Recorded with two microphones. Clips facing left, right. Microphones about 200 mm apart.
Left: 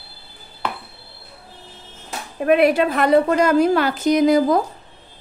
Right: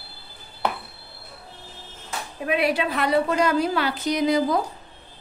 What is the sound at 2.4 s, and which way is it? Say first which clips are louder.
Speech: left 8 dB; 50° left (ahead or behind).